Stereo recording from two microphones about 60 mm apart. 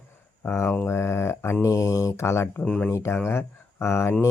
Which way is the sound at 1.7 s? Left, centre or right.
Left.